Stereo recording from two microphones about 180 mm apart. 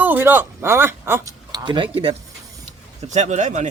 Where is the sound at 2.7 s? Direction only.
40° right (ahead or behind).